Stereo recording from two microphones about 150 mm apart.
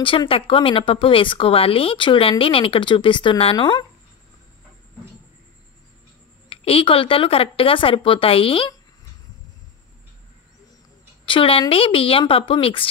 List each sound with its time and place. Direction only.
0.0 s speech: 35° left (ahead or behind)
6.5 s speech: 40° left (ahead or behind)
11.2 s speech: 35° left (ahead or behind)